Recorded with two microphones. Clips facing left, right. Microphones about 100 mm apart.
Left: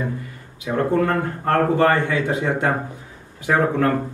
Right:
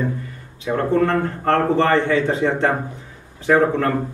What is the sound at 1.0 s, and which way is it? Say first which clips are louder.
Speech: right 2 dB; 10° left (ahead or behind).